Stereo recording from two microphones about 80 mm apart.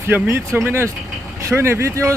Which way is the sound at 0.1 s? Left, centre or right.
Right.